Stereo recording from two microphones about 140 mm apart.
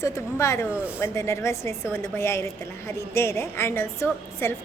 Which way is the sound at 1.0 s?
20° left (ahead or behind).